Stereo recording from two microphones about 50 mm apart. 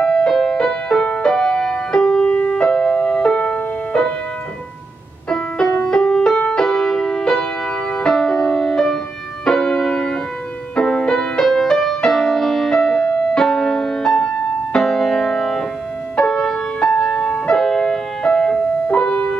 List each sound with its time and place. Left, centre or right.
0.0 s music: centre
5.3 s music: centre